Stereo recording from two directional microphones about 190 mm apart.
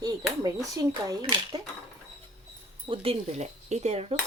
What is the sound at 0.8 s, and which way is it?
Speech, 20° right (ahead or behind).